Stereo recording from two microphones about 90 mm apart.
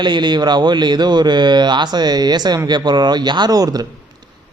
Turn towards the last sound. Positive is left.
turn(degrees=-45)  # may be behind; listen again after turning